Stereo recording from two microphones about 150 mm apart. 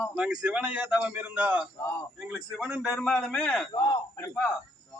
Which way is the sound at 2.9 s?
Centre (ahead or behind).